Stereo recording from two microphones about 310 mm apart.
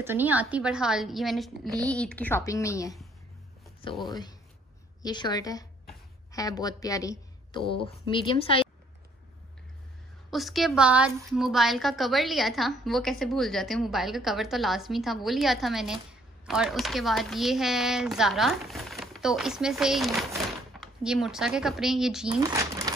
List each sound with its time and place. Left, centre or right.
0.0 s a woman's voice: centre
4.1 s a woman's voice: centre
10.3 s a woman's voice: centre